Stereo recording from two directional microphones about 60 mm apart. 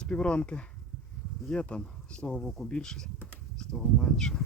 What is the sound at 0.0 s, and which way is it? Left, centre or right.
Speech, centre.